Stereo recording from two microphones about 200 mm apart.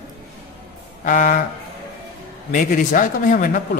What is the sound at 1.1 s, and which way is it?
Speech, 40° left (ahead or behind).